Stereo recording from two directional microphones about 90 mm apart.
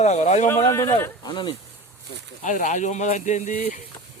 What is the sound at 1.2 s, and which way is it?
Speech, 60° left (ahead or behind).